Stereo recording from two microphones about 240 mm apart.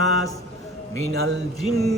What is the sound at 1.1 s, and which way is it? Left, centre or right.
Speech, right.